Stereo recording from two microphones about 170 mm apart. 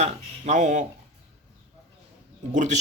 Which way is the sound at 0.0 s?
45° right (ahead or behind).